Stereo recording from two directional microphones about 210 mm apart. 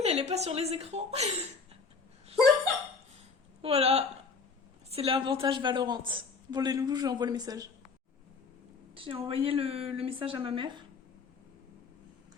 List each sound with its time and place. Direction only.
0.0 s a woman's voice: 30° right (ahead or behind)
3.6 s a woman's voice: 30° right (ahead or behind)
9.0 s a woman's voice: 25° right (ahead or behind)